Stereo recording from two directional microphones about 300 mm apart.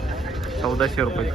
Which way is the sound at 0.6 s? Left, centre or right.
Centre.